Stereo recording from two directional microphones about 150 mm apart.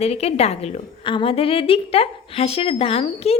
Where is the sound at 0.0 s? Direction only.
45° left (ahead or behind).